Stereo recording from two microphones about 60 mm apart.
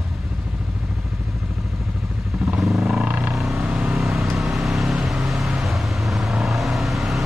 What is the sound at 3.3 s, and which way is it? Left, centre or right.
Vehicle, centre.